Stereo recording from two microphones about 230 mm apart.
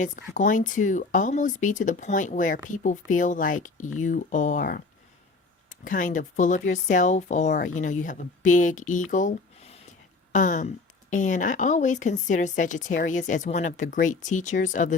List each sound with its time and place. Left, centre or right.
0.3 s speech: left
5.8 s speech: left